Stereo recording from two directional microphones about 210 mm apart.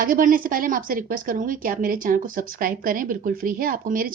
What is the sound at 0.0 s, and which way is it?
A woman's voice, 40° right (ahead or behind).